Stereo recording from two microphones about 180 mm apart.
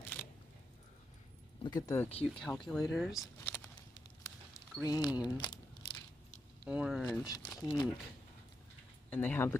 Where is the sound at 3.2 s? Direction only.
15° left (ahead or behind).